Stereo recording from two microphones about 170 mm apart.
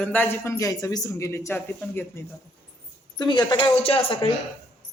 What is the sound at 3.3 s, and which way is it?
Speech, 25° left (ahead or behind).